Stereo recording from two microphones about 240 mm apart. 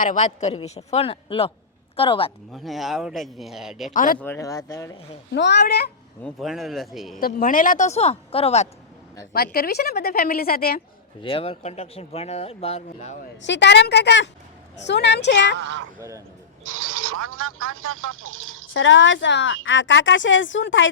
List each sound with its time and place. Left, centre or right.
0.0 s speech: left
2.5 s speech: centre
3.9 s a woman's voice: left
4.2 s speech: centre
5.3 s speech: left
6.2 s speech: centre
7.2 s speech: left
9.3 s a woman's voice: left
11.2 s speech: left
13.4 s speech: left
15.5 s speech: right
16.0 s a man's voice: centre
16.6 s speech: right
18.7 s speech: left